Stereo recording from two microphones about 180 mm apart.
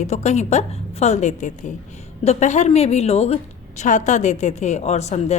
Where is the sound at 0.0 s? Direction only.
40° left (ahead or behind).